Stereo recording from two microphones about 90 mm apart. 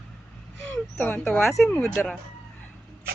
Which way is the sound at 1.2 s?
5° left (ahead or behind).